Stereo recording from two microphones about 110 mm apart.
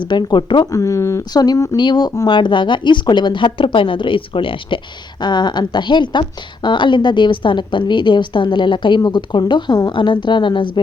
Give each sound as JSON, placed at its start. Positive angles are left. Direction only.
{"t": 0.0, "sound": "a woman's voice", "side_deg": 45}
{"t": 0.7, "sound": "speech", "side_deg": 30}
{"t": 1.3, "sound": "a woman's voice", "side_deg": 35}